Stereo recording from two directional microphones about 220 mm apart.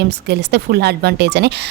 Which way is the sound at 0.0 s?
50° right (ahead or behind).